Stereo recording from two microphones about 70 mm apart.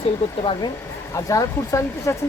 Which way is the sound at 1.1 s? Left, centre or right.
Left.